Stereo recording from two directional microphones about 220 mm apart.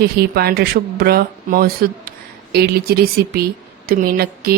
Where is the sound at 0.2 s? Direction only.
45° right (ahead or behind).